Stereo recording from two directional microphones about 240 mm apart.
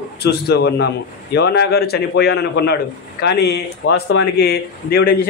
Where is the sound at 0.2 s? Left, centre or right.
Left.